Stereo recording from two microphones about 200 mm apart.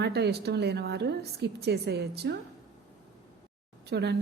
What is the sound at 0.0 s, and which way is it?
A woman's voice, 55° right (ahead or behind).